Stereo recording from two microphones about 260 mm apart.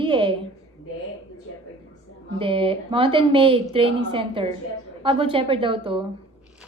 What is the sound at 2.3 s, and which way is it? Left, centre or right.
A woman's voice, centre.